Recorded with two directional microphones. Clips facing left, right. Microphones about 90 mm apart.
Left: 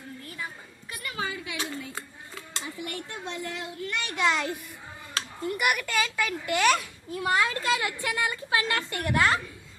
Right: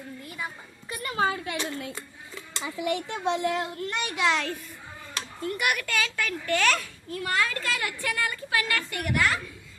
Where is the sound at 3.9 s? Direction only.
20° right (ahead or behind).